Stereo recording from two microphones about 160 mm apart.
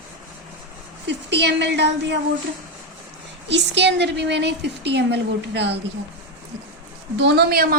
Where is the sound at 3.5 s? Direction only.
90° right.